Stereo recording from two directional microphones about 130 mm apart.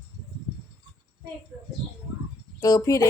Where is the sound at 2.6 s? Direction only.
30° left (ahead or behind).